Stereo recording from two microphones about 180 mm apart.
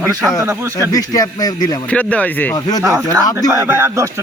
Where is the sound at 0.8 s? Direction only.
20° left (ahead or behind).